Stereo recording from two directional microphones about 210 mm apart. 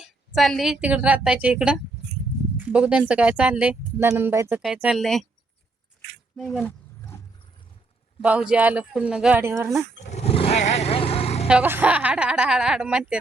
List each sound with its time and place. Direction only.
0.0 s speech: centre (ahead or behind)
6.3 s speech: centre (ahead or behind)
6.7 s roaring cats: 10° left (ahead or behind)
8.2 s speech: 5° right (ahead or behind)
10.0 s vehicle: 30° left (ahead or behind)
11.4 s speech: 5° right (ahead or behind)